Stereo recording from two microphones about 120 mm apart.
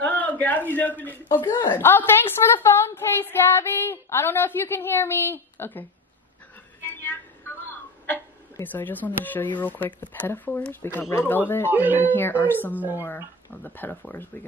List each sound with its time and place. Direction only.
0.0 s a man's voice: 15° left (ahead or behind)
6.9 s a woman's voice: 15° left (ahead or behind)
11.7 s speech: 15° right (ahead or behind)
12.1 s speech: 15° left (ahead or behind)